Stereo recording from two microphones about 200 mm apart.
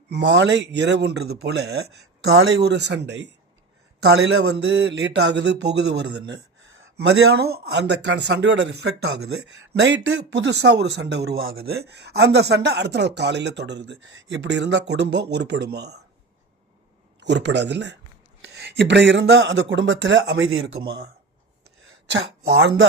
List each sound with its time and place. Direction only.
0.1 s speech: 60° right (ahead or behind)
17.2 s speech: 60° right (ahead or behind)
20.8 s speech: 50° right (ahead or behind)